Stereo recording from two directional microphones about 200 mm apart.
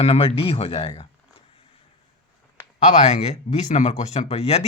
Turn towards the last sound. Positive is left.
turn(degrees=35)  # may be behind; listen again after turning